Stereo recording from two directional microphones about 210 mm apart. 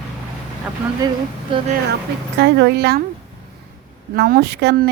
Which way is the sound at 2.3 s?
55° right (ahead or behind).